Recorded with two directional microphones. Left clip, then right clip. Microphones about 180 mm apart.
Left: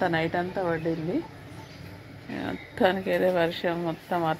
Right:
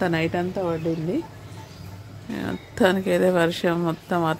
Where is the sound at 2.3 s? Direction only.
50° right (ahead or behind).